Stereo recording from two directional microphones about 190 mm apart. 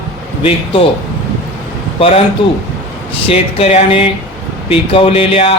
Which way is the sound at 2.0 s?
30° left (ahead or behind).